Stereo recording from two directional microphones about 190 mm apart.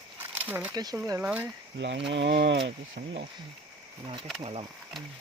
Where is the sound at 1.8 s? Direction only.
65° right (ahead or behind).